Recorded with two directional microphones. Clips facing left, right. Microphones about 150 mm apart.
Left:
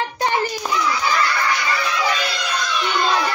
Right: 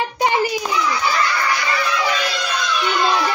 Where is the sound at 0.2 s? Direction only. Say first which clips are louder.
Right 3 dB; 10° right (ahead or behind).